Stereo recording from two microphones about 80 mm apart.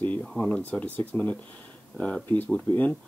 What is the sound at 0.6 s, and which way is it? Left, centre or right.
Speech, centre.